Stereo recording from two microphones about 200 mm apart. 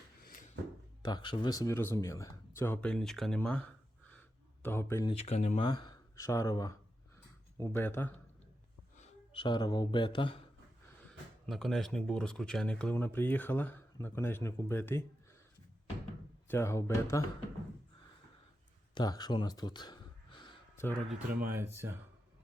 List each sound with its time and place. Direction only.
0.3 s a sound: 40° left (ahead or behind)
1.0 s speech: 20° left (ahead or behind); by 3.6 s 5° left (ahead or behind)
4.6 s speech: 10° left (ahead or behind)
5.2 s speech: 35° left (ahead or behind)
5.6 s speech: 20° left (ahead or behind)
9.0 s speech: 25° left (ahead or behind)
11.4 s speech: centre (ahead or behind)
16.5 s speech: 15° left (ahead or behind)
18.9 s speech: 20° left (ahead or behind)
21.1 s speech: 10° right (ahead or behind)